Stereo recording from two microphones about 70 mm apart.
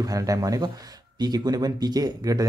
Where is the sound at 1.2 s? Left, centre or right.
Right.